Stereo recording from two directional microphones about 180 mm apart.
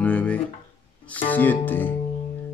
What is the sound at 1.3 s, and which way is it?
Speech, 10° left (ahead or behind).